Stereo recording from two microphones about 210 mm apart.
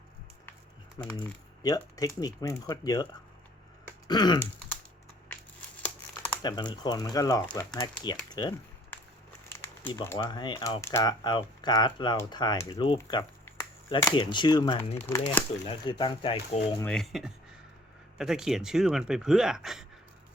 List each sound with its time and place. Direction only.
1.6 s speech: 15° left (ahead or behind)
4.0 s throat clearing: 20° left (ahead or behind)
5.3 s crumpling: 10° left (ahead or behind)
6.4 s speech: 20° left (ahead or behind)
15.6 s speech: 25° left (ahead or behind)
16.8 s speech: 5° left (ahead or behind)